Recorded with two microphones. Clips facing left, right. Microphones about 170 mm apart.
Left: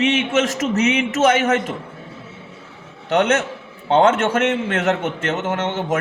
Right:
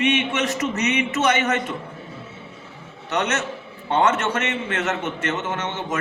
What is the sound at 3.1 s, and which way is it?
A man's voice, 55° left (ahead or behind).